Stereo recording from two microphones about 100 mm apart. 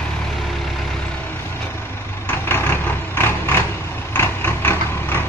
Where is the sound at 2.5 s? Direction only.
25° left (ahead or behind).